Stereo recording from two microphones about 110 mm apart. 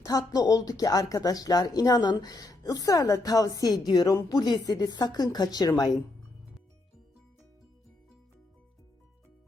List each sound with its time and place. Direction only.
0.0 s speech: 35° left (ahead or behind)